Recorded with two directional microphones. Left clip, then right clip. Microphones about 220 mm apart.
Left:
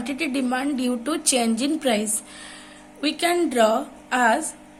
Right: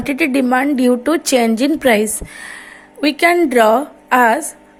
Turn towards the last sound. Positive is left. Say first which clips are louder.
# right 8 dB
turn(degrees=-35)  # may be behind; listen again after turning